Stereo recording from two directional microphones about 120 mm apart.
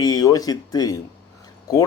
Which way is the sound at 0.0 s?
30° left (ahead or behind).